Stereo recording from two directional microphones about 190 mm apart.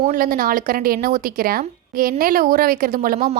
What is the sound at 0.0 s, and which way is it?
Speech, 45° right (ahead or behind).